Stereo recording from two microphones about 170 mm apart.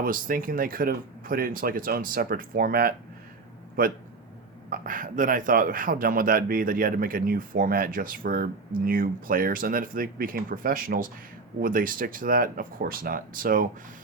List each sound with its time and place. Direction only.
0.0 s speech: 55° right (ahead or behind)
4.7 s speech: 55° right (ahead or behind)